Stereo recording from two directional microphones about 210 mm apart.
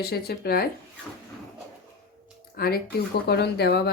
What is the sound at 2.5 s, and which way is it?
Speech, 45° left (ahead or behind).